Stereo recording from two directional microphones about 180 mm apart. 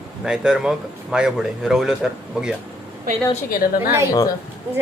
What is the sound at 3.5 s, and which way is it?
Speech, 55° left (ahead or behind).